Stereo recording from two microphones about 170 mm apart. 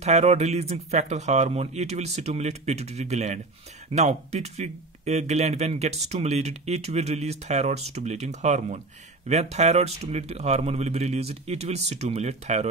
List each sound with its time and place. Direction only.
0.0 s speech: 40° right (ahead or behind)